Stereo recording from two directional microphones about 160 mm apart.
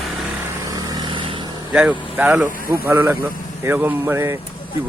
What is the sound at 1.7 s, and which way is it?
A man's voice, 10° right (ahead or behind).